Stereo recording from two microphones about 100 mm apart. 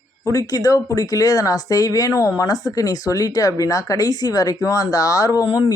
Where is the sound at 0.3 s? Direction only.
35° left (ahead or behind).